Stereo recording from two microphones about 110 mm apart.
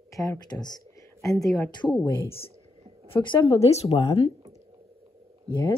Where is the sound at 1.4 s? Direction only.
30° left (ahead or behind).